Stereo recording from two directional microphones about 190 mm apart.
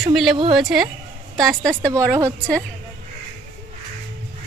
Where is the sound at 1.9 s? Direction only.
15° right (ahead or behind).